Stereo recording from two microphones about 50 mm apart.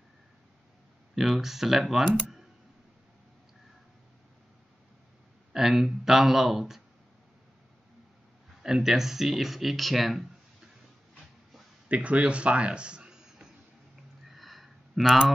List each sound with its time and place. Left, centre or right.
1.1 s speech: centre
5.5 s speech: centre
8.6 s speech: centre
11.9 s speech: right
14.2 s a sound: centre